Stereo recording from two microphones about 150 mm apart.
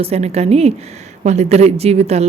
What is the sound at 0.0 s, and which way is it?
A woman's voice, 45° right (ahead or behind).